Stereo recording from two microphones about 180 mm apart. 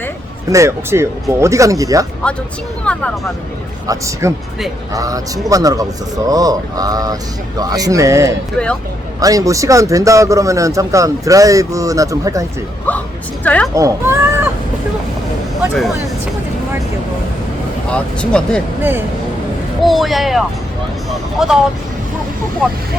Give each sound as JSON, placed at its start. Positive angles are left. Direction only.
{"t": 0.5, "sound": "speech", "side_deg": -15}
{"t": 2.8, "sound": "speech", "side_deg": 5}
{"t": 3.8, "sound": "speech", "side_deg": -15}
{"t": 13.4, "sound": "speech", "side_deg": 5}
{"t": 13.7, "sound": "speech", "side_deg": -15}
{"t": 17.9, "sound": "speech", "side_deg": 5}
{"t": 18.8, "sound": "speech", "side_deg": -10}
{"t": 19.8, "sound": "speech", "side_deg": 0}